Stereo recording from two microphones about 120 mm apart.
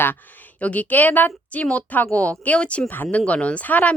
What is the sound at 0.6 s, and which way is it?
A woman's voice, 10° left (ahead or behind).